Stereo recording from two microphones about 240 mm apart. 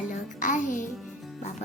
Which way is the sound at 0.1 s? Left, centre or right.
Left.